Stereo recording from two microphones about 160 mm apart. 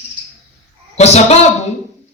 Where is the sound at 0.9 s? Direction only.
40° left (ahead or behind).